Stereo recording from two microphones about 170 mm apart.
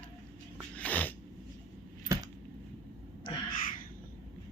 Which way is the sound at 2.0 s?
20° right (ahead or behind).